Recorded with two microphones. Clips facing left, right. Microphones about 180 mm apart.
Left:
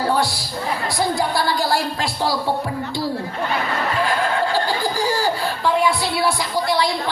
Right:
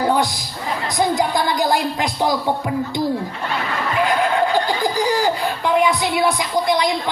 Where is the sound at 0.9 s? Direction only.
20° right (ahead or behind).